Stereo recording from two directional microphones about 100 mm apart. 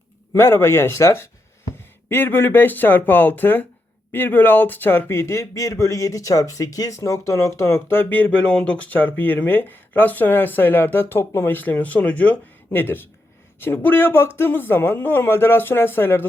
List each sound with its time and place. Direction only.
0.3 s a man's voice: 25° left (ahead or behind)